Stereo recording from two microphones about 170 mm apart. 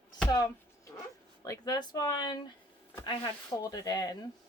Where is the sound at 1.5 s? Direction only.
20° left (ahead or behind).